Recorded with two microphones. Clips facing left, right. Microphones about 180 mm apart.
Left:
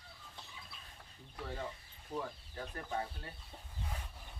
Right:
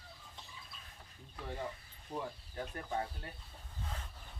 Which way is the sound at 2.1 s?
10° right (ahead or behind).